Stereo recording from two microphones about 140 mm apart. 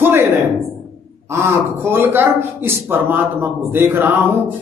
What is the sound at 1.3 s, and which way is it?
A man's voice, 15° right (ahead or behind).